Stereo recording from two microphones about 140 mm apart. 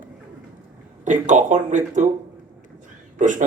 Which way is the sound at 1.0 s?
60° right (ahead or behind).